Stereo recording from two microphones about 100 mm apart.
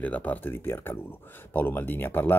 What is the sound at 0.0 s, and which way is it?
Speech, 15° left (ahead or behind).